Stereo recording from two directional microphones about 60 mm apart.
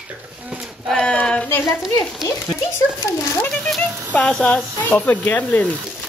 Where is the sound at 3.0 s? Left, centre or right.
Left.